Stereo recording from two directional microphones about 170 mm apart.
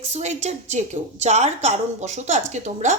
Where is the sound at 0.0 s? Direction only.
40° right (ahead or behind).